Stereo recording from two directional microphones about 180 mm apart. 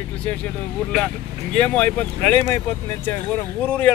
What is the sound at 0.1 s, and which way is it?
Speech, 10° left (ahead or behind).